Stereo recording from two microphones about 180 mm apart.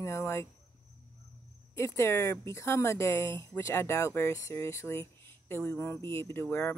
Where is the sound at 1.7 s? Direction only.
15° left (ahead or behind).